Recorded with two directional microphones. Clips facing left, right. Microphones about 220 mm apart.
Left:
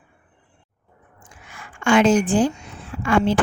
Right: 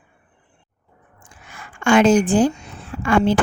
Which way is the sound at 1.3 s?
40° right (ahead or behind).